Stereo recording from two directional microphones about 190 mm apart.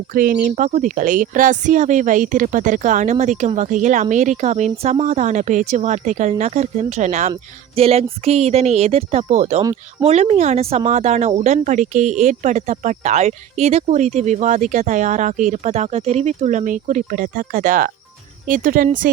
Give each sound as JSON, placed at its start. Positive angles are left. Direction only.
{"t": 0.1, "sound": "speech", "side_deg": -45}